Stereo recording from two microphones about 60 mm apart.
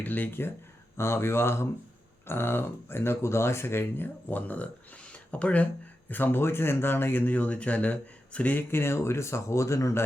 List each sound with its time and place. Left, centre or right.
0.0 s speech: left
0.9 s speech: left
6.1 s speech: left
8.7 s speech: left